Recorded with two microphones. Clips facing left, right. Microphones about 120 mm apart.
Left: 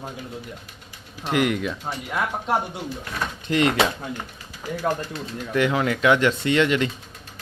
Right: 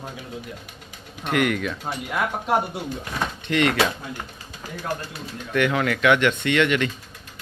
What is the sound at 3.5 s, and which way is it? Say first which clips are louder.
Speech: left 1 dB; 30° left (ahead or behind).